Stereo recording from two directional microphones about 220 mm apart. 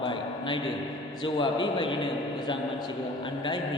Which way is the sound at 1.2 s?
20° left (ahead or behind).